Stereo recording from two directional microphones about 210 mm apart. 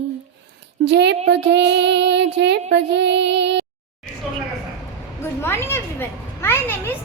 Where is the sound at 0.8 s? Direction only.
55° right (ahead or behind).